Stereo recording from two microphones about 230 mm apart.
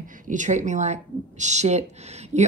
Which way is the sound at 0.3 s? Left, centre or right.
Right.